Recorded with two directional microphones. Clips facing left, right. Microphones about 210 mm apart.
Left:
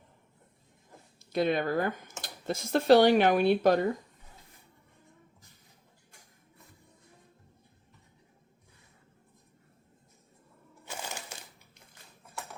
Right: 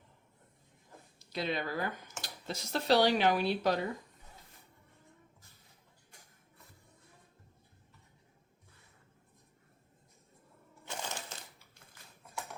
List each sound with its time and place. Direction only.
1.3 s speech: 50° left (ahead or behind)
10.8 s crushing: 10° left (ahead or behind)